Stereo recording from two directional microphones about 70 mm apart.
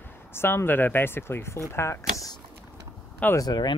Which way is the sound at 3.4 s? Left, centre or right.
Left.